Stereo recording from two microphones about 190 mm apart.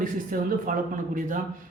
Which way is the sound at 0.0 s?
45° right (ahead or behind).